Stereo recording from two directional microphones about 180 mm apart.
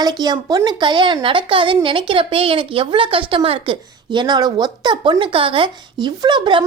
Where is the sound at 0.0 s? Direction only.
20° right (ahead or behind).